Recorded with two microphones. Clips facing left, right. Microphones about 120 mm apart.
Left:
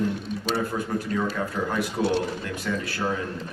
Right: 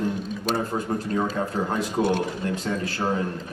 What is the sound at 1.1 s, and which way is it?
Speech, 30° right (ahead or behind).